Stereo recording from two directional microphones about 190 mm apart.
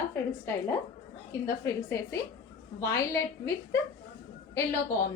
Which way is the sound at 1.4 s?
15° left (ahead or behind).